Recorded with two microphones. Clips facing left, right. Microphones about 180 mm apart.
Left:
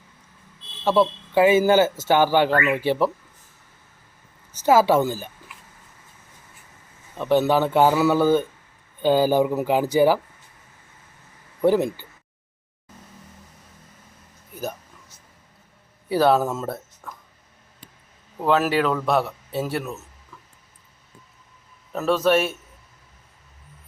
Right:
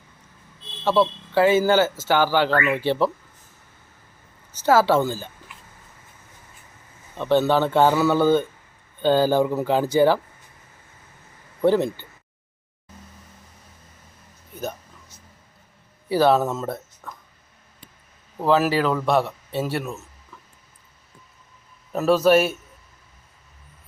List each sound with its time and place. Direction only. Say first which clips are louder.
0.9 s a man's voice: left 1 dB; 15° left (ahead or behind)
4.6 s a man's voice: left 1 dB; 15° left (ahead or behind)
7.2 s a man's voice: even; 10° left (ahead or behind)
11.6 s a man's voice: even; 5° left (ahead or behind)
14.5 s a sound: even; 5° left (ahead or behind)
16.0 s speech: even; centre (ahead or behind)
18.3 s a man's voice: right 1 dB; centre (ahead or behind)
21.9 s a man's voice: right 3 dB; 5° right (ahead or behind)